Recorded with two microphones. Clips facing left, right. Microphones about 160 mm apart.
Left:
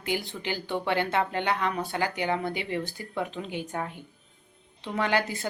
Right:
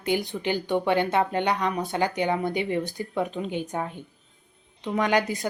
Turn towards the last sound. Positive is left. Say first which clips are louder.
# right 3 dB
turn(degrees=-15)  # may be behind; listen again after turning